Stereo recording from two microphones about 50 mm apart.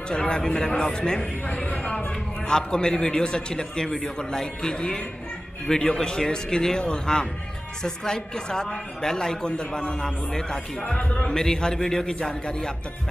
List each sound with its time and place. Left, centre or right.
0.1 s a man's voice: centre
11.0 s a man's voice: left
11.2 s a man's voice: centre